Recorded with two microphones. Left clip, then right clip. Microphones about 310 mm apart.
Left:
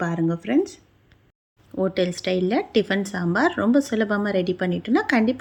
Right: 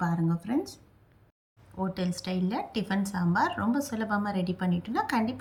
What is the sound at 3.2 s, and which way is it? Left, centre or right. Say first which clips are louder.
Speech: left 5 dB; centre.